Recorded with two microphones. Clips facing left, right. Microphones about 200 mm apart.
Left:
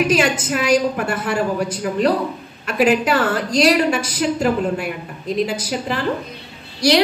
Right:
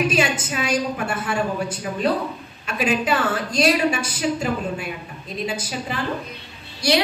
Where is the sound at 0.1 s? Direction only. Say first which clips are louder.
Left 4 dB; 85° left.